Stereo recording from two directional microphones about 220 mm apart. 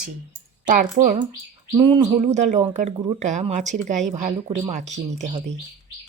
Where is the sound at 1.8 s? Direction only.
25° right (ahead or behind).